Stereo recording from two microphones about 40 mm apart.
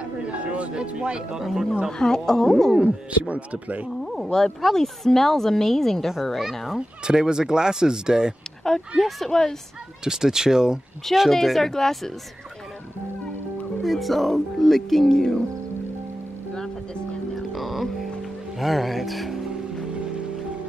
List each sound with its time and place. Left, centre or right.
0.2 s a sound: right
1.4 s speech: centre
1.9 s a woman's voice: centre
2.7 s speech: right
3.1 s speech: right
3.9 s a woman's voice: centre
7.1 s speech: centre
8.9 s speech: centre
9.3 s a woman's voice: centre
10.0 s speech: centre
11.2 s speech: centre
13.8 s speech: centre
17.4 s music: centre
18.6 s speech: centre